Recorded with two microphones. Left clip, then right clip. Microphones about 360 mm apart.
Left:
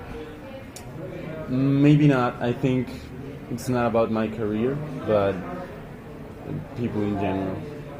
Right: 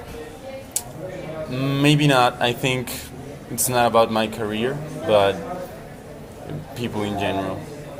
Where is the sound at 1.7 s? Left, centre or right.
Right.